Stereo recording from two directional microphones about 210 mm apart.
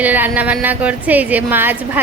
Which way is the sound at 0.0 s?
10° right (ahead or behind).